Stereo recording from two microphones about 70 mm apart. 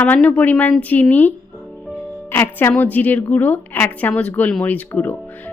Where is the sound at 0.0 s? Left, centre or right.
Centre.